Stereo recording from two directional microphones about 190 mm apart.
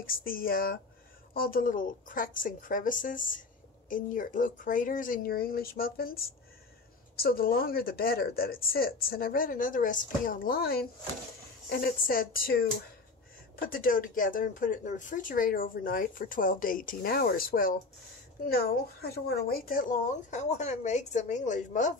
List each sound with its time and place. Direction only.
0.0 s speech: 50° left (ahead or behind)